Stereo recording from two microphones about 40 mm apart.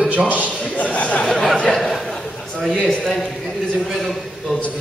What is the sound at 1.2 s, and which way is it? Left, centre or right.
Speech, centre.